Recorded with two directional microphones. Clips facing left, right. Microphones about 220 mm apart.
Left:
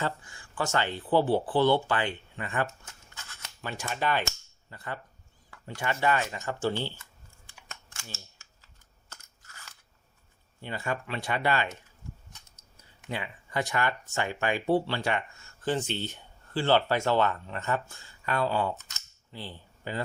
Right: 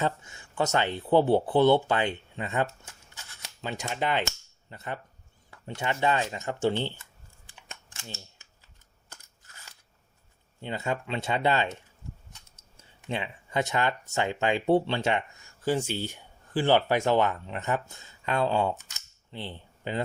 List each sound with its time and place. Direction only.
0.0 s speech: 20° right (ahead or behind)
7.9 s scissors: 20° right (ahead or behind)
9.1 s crunch: 15° right (ahead or behind)
10.6 s speech: 20° right (ahead or behind)
12.7 s a sound: 25° right (ahead or behind)
14.1 s speech: 20° right (ahead or behind)